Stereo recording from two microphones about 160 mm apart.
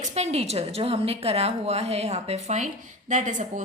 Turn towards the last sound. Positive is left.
turn(degrees=-50)  # may be behind; listen again after turning